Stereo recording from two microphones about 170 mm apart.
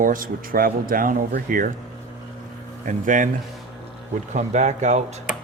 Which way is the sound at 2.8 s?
50° right (ahead or behind).